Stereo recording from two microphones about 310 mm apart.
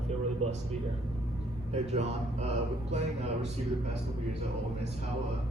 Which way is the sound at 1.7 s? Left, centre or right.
Right.